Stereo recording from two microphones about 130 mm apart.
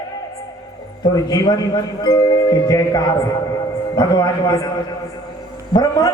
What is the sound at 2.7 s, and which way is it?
A man's voice, 30° left (ahead or behind).